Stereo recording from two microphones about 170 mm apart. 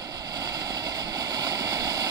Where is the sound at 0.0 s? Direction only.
20° right (ahead or behind).